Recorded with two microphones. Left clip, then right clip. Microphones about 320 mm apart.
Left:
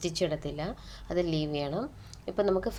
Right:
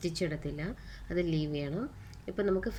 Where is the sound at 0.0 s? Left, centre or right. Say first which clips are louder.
Left 4 dB; centre.